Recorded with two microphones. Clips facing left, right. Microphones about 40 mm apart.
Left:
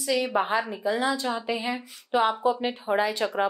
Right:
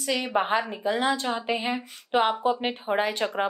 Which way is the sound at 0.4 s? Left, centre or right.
Right.